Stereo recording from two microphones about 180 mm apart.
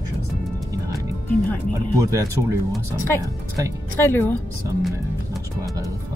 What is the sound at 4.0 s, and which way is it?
Speech, 10° left (ahead or behind).